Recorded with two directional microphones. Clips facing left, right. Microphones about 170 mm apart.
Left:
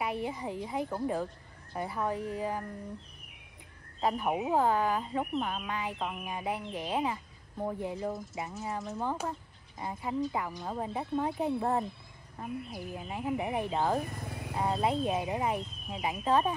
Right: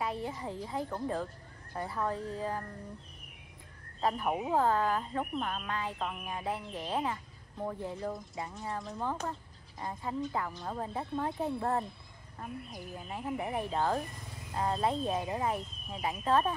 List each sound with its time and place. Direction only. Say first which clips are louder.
0.0 s speech: left 2 dB; 15° left (ahead or behind)
4.0 s speech: left 2 dB; 5° left (ahead or behind)
8.5 s speech: left 3 dB; 5° left (ahead or behind)
14.1 s cricket: left 8 dB; 60° left (ahead or behind)
14.6 s speech: left 1 dB; 10° left (ahead or behind)